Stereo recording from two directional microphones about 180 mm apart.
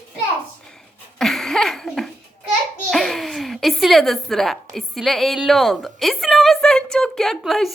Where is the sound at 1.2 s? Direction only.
Centre (ahead or behind).